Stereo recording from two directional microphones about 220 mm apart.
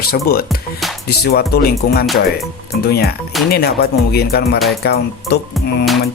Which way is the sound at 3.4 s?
45° left (ahead or behind).